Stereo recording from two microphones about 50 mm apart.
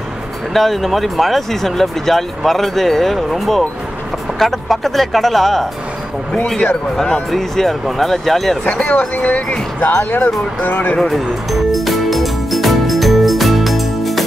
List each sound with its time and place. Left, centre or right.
0.5 s speech: centre
7.2 s speech: centre
9.1 s speech: left
11.0 s speech: centre
11.7 s music: centre